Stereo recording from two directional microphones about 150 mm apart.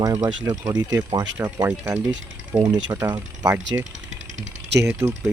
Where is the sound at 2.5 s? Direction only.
30° right (ahead or behind).